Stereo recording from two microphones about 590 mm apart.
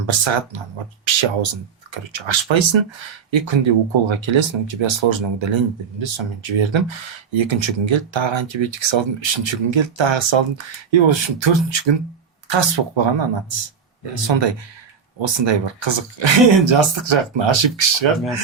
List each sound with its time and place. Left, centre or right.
0.1 s speech: right